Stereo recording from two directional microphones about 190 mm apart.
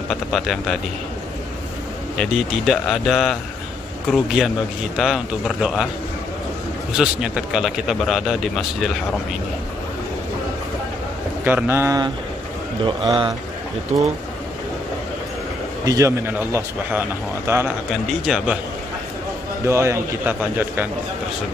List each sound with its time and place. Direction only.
0.1 s a man's voice: centre (ahead or behind)
2.1 s a man's voice: centre (ahead or behind)
7.0 s a man's voice: 5° right (ahead or behind)
11.4 s a man's voice: 10° right (ahead or behind); by 13.3 s 25° right (ahead or behind)
15.8 s a man's voice: 15° right (ahead or behind)
19.6 s a man's voice: 15° right (ahead or behind)